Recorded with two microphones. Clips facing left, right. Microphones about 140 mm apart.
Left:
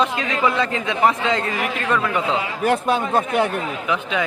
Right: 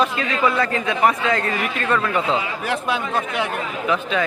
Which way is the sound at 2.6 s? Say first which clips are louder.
Left 4 dB; 45° left (ahead or behind).